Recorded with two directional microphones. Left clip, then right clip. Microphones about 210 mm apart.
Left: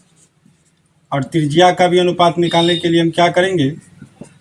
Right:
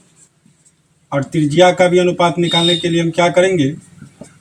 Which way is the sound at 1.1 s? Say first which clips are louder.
Right 1 dB; 25° left (ahead or behind).